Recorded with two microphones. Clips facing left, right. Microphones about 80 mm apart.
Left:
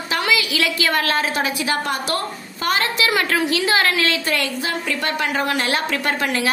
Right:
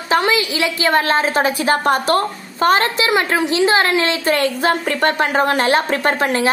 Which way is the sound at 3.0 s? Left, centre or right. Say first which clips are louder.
Right 3 dB; right.